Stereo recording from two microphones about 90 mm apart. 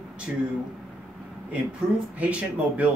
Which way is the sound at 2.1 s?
15° right (ahead or behind).